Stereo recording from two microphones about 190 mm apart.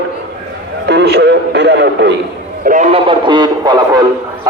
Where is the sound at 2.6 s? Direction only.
40° right (ahead or behind); by 4.5 s 20° right (ahead or behind).